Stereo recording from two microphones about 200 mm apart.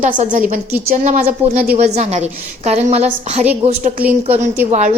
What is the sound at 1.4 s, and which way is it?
Speech, 10° right (ahead or behind).